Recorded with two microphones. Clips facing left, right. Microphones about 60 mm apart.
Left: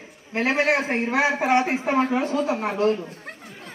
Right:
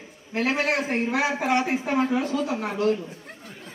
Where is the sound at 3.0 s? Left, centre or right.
Left.